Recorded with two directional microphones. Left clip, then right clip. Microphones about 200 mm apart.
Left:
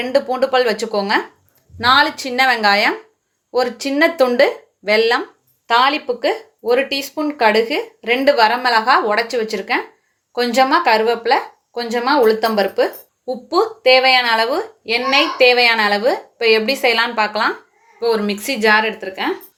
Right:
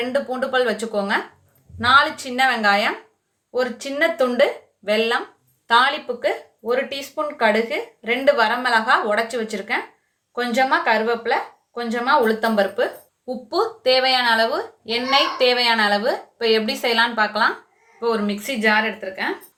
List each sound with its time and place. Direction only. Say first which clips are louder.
0.1 s speech: left 6 dB; 30° left (ahead or behind)
5.6 s a woman's voice: left 2 dB; 30° left (ahead or behind)
6.1 s a woman's voice: left 4 dB; 40° left (ahead or behind)
18.0 s a woman's voice: left 4 dB; 45° left (ahead or behind)